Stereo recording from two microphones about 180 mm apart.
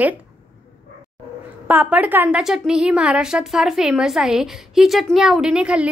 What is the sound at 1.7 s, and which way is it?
A woman's voice, 10° right (ahead or behind).